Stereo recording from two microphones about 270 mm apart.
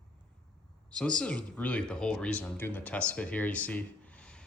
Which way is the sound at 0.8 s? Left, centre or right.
Centre.